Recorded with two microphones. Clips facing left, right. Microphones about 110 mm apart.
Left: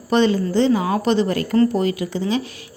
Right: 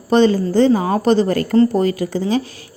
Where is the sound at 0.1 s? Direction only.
35° right (ahead or behind).